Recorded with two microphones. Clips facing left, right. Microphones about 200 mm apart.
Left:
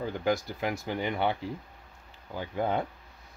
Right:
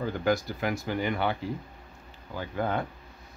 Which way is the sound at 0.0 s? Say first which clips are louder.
Right 2 dB; 20° left (ahead or behind).